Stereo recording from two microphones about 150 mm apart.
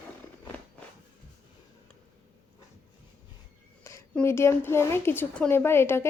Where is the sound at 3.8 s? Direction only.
20° left (ahead or behind).